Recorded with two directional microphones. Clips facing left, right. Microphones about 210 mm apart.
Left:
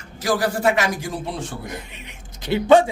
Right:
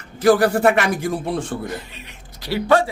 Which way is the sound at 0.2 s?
60° right (ahead or behind).